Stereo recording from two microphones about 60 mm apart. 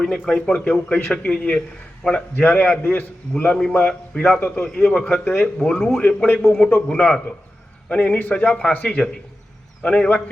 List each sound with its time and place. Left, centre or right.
0.3 s speech: centre
0.6 s a man's voice: left